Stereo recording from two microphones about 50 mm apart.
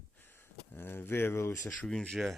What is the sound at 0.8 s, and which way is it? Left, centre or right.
Speech, left.